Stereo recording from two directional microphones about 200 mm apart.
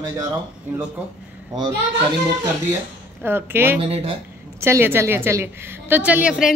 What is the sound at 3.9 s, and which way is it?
Speech, 30° right (ahead or behind).